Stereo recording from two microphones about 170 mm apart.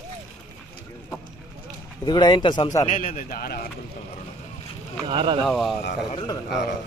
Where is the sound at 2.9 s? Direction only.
50° left (ahead or behind).